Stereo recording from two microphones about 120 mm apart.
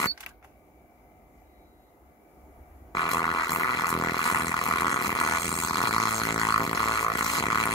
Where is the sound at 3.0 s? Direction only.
35° left (ahead or behind).